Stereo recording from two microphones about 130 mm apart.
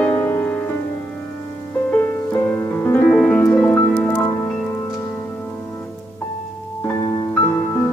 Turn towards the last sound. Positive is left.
turn(degrees=15)  # may be behind; listen again after turning